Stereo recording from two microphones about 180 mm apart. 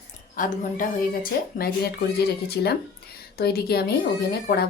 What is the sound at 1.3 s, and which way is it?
Speech, 60° left (ahead or behind).